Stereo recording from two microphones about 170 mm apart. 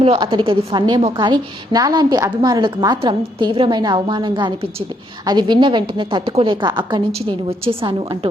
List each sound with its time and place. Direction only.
0.0 s a woman's voice: 30° right (ahead or behind)